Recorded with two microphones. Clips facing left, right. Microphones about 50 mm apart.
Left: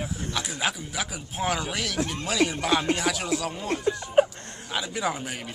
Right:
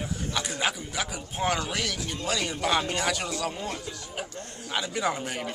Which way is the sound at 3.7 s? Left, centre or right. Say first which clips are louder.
Left 14 dB; left.